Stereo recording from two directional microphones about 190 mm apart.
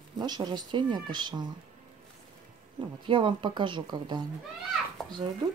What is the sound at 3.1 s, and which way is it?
A woman's voice, 25° right (ahead or behind).